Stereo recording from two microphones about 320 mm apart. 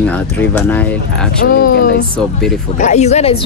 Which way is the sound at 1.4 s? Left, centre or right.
Left.